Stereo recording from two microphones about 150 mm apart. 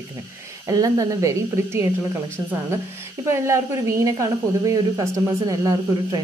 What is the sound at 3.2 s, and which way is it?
Speech, 20° right (ahead or behind).